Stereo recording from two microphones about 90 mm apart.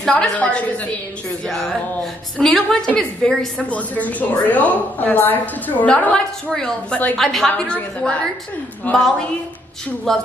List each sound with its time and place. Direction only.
0.0 s a woman's voice: 10° left (ahead or behind)
1.5 s music: 5° left (ahead or behind)
2.3 s a woman's voice: 10° left (ahead or behind)
10.1 s music: 5° left (ahead or behind)